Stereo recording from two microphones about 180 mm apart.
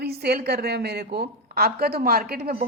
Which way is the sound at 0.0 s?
60° right (ahead or behind).